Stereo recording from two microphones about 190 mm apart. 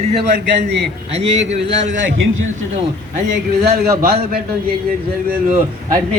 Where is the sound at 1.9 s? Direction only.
90° right.